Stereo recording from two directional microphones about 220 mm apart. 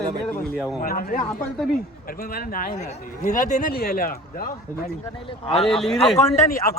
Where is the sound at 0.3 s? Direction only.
10° left (ahead or behind).